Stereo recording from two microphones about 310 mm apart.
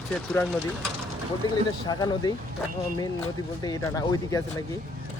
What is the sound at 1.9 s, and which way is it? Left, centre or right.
Speech, centre.